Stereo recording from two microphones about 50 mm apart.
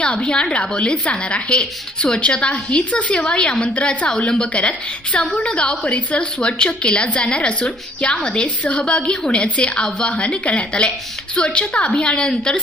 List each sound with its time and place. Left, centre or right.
0.0 s a woman's voice: left